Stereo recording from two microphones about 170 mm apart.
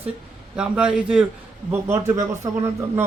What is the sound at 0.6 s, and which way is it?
A man's voice, 5° right (ahead or behind).